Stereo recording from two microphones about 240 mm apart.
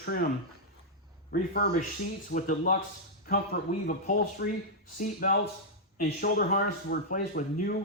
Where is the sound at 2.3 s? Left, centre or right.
Left.